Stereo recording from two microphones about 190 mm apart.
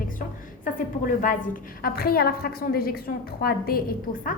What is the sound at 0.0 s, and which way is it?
A woman's voice, 45° left (ahead or behind).